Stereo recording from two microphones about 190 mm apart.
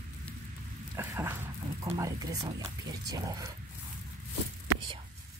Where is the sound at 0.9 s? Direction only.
15° right (ahead or behind).